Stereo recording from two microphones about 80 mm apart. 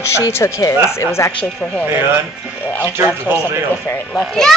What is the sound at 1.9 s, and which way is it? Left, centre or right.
Speech, right.